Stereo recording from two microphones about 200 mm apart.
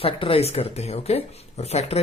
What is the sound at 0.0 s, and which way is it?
Speech, 30° left (ahead or behind).